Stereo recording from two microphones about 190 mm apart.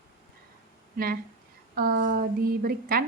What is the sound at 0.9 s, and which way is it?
A woman's voice, 50° right (ahead or behind).